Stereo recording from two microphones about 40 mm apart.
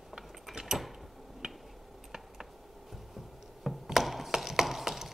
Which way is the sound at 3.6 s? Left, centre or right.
Centre.